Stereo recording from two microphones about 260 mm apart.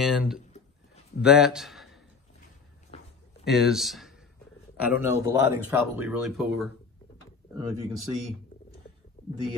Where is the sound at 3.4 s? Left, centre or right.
Centre.